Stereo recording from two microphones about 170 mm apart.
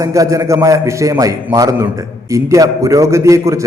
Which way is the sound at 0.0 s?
20° right (ahead or behind).